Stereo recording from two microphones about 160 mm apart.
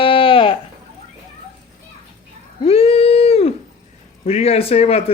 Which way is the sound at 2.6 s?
35° left (ahead or behind).